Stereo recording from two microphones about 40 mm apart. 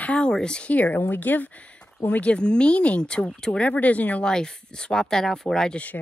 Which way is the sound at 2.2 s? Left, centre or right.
Left.